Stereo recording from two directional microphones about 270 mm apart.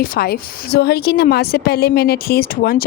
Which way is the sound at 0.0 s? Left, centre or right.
Left.